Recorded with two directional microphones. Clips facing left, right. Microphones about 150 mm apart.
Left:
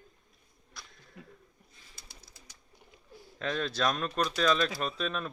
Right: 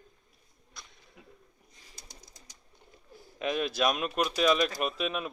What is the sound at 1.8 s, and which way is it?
Bird, 40° right (ahead or behind).